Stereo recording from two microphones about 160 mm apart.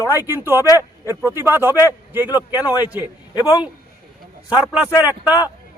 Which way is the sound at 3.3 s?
25° left (ahead or behind).